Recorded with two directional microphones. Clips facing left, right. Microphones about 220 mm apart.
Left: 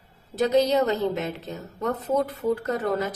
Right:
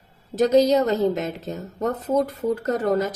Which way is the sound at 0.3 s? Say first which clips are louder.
Right 4 dB; 40° right (ahead or behind).